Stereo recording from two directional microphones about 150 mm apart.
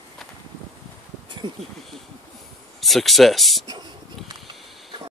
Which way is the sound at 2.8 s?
Centre (ahead or behind).